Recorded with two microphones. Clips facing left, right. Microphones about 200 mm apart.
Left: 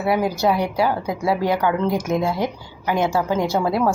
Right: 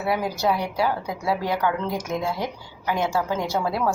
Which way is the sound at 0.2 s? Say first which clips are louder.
Left 4 dB; 65° left (ahead or behind).